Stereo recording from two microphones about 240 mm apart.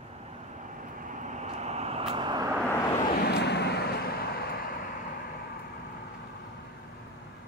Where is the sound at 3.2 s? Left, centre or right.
Left.